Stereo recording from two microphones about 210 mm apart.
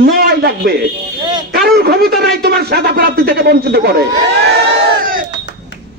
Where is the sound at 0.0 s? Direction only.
50° right (ahead or behind).